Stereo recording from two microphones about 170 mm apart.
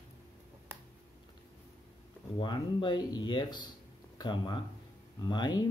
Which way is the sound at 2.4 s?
25° left (ahead or behind).